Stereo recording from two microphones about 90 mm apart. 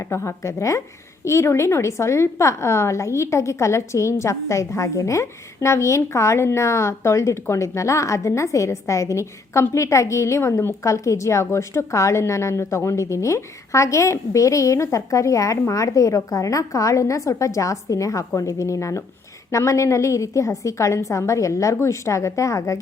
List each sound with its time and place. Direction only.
0.0 s a woman's voice: 30° left (ahead or behind)